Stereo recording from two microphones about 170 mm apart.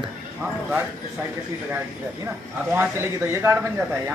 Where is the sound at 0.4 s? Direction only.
10° right (ahead or behind).